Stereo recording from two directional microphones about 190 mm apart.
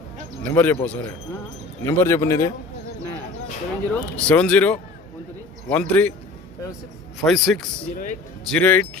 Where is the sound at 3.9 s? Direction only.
5° left (ahead or behind).